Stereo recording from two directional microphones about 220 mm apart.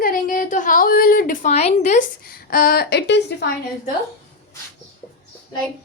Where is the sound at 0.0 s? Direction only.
40° left (ahead or behind).